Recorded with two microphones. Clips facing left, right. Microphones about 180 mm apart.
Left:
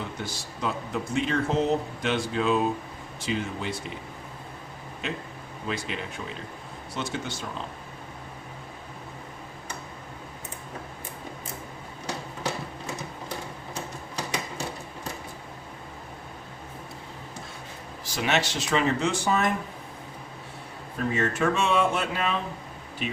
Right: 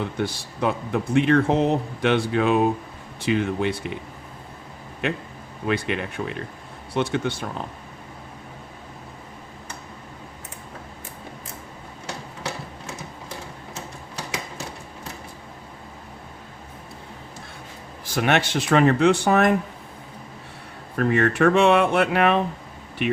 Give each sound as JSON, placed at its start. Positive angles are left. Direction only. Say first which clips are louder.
{"t": 0.0, "sound": "speech", "louder": "right 8 dB", "side_deg": -60}
{"t": 5.6, "sound": "speech", "louder": "right 8 dB", "side_deg": -60}
{"t": 18.0, "sound": "speech", "louder": "right 5 dB", "side_deg": -55}
{"t": 20.9, "sound": "speech", "louder": "right 6 dB", "side_deg": -65}